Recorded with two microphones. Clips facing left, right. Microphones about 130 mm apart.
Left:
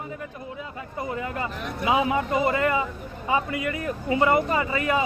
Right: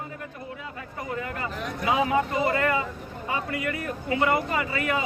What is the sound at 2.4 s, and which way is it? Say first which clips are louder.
Speech: left 1 dB; 20° left (ahead or behind).